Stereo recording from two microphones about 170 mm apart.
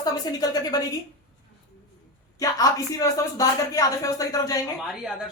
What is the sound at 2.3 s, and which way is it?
Speech, 20° left (ahead or behind).